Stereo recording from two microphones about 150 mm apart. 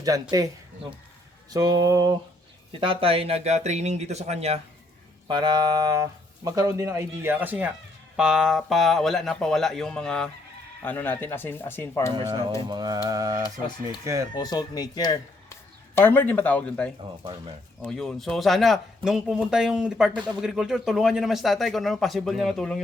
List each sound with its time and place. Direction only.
0.0 s speech: 25° right (ahead or behind)
1.5 s speech: 25° right (ahead or behind)
2.8 s speech: 35° right (ahead or behind)
5.3 s speech: 30° right (ahead or behind); by 12.1 s 15° left (ahead or behind)
12.6 s speech: 25° right (ahead or behind)
14.3 s speech: 25° left (ahead or behind)
16.0 s speech: 15° left (ahead or behind)